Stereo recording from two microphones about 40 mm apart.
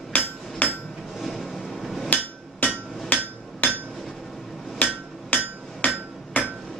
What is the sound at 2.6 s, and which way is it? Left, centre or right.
Hammer, left.